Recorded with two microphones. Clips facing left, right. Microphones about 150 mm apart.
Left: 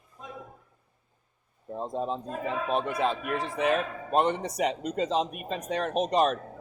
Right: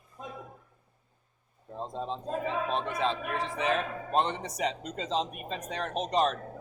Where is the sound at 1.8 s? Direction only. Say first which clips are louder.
Left 4 dB; 10° left (ahead or behind).